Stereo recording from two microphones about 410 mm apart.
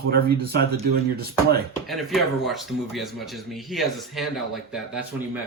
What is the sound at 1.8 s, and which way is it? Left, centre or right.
Speech, centre.